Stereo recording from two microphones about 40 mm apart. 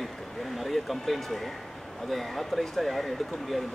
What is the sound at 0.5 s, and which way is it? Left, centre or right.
Speech, centre.